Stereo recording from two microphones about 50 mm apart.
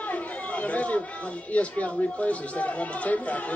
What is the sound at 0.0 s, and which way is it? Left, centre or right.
Speech, left.